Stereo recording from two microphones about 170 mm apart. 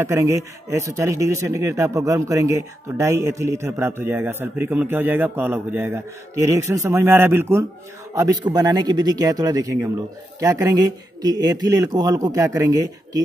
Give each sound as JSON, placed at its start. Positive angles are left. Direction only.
{"t": 0.0, "sound": "speech", "side_deg": -15}